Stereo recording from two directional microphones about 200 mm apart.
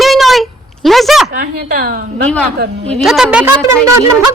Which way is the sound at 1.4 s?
45° right (ahead or behind).